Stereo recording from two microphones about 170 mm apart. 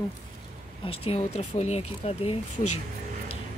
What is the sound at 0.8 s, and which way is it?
Speech, 35° left (ahead or behind).